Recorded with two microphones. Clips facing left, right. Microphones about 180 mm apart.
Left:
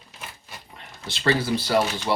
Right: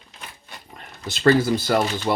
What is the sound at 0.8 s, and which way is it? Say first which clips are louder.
Speech: right 7 dB; 45° right (ahead or behind).